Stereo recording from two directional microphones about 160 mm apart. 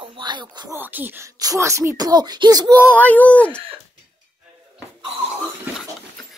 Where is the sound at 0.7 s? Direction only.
10° right (ahead or behind).